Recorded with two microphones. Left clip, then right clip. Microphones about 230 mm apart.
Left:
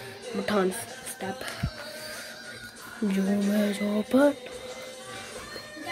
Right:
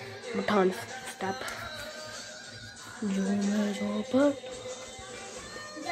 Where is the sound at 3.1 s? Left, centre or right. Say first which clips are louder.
Left 4 dB; left.